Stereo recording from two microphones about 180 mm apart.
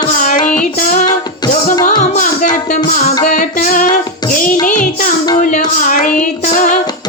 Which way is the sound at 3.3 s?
45° left (ahead or behind).